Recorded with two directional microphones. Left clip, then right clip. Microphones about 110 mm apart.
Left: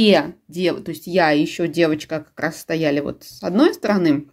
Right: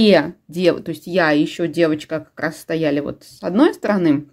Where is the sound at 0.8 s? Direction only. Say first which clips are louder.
Even; 20° right (ahead or behind).